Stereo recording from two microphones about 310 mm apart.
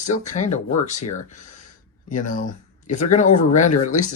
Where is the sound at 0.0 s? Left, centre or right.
Left.